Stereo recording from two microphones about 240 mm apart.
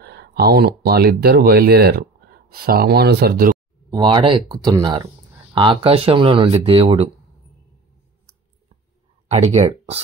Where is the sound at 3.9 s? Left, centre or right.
Centre.